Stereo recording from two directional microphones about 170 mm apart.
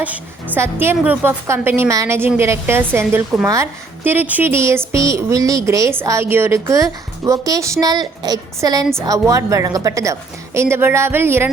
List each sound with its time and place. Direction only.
0.0 s a woman's voice: 10° right (ahead or behind)